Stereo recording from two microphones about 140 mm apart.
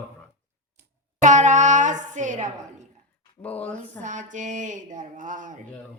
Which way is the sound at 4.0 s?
60° right (ahead or behind).